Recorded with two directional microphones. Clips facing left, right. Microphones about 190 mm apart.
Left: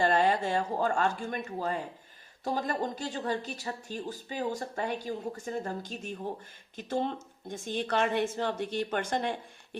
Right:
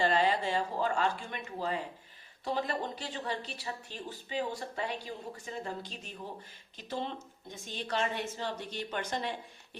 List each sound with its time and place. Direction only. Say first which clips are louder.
0.0 s speech: left 3 dB; 50° left (ahead or behind)